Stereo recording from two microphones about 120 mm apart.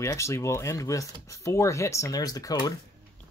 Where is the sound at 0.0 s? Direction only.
25° left (ahead or behind).